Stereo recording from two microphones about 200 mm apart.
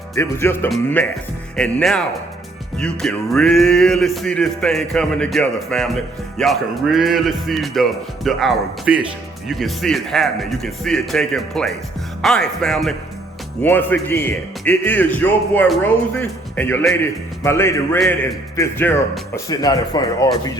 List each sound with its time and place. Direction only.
0.2 s a man's voice: 10° left (ahead or behind)
1.5 s music: 5° left (ahead or behind)
13.6 s a man's voice: 10° left (ahead or behind)
18.0 s music: centre (ahead or behind)
18.5 s a man's voice: 10° left (ahead or behind)